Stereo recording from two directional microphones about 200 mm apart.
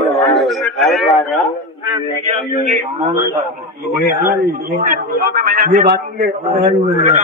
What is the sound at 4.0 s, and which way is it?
Speech, 50° left (ahead or behind).